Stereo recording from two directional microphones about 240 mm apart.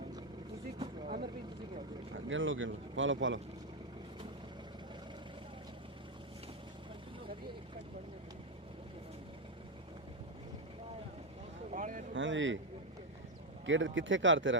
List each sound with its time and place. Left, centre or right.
1.0 s vehicle: right
2.1 s speech: right
11.7 s a sound: right
12.1 s speech: right
13.7 s speech: right